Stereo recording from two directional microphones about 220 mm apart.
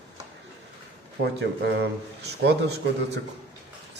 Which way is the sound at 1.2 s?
50° right (ahead or behind).